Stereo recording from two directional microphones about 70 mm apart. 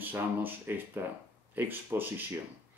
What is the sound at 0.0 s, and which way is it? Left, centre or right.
Speech, right.